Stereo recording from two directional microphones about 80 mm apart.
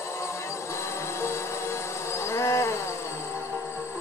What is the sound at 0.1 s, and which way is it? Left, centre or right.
Vehicle, left.